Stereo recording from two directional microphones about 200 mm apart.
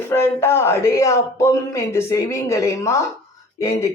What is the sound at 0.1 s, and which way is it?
Speech, 10° left (ahead or behind).